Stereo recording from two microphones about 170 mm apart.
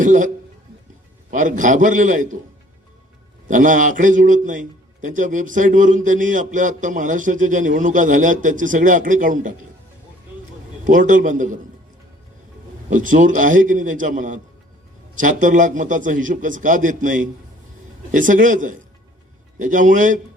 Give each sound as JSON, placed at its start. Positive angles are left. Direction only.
{"t": 0.0, "sound": "a man's voice", "side_deg": -50}
{"t": 1.3, "sound": "a man's voice", "side_deg": -50}
{"t": 3.5, "sound": "a man's voice", "side_deg": -50}
{"t": 10.8, "sound": "a man's voice", "side_deg": -50}
{"t": 12.9, "sound": "a man's voice", "side_deg": -50}